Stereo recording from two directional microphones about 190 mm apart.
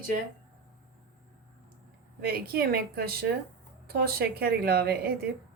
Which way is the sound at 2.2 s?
55° right (ahead or behind).